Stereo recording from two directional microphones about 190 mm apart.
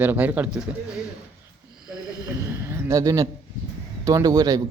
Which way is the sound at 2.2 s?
15° right (ahead or behind).